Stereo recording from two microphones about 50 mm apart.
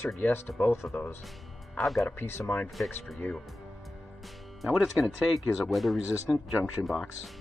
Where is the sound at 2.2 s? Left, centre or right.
Left.